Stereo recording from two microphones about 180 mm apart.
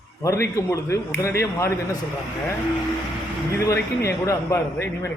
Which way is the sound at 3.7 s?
15° left (ahead or behind).